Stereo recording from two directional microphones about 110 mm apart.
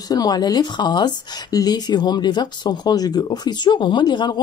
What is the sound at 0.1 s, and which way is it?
Speech, 35° left (ahead or behind).